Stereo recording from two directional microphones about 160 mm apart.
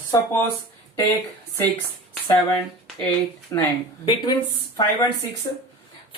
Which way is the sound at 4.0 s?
30° left (ahead or behind).